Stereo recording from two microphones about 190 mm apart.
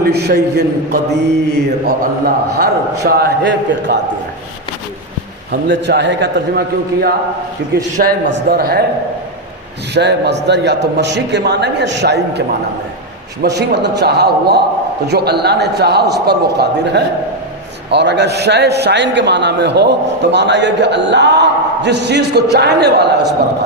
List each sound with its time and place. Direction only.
0.0 s a man's voice: 60° right (ahead or behind)
5.5 s a man's voice: 65° right (ahead or behind)
8.3 s a man's voice: 55° right (ahead or behind)
9.9 s a man's voice: 60° right (ahead or behind)
13.4 s a man's voice: 60° right (ahead or behind)